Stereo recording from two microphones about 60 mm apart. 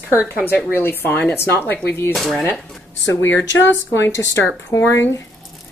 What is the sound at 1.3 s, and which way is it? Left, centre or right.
Speech, left.